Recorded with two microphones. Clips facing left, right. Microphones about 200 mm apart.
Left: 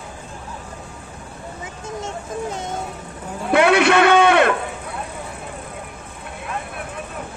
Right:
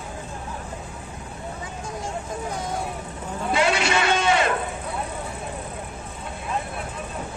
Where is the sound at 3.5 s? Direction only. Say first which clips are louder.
Left 8 dB; 60° left (ahead or behind).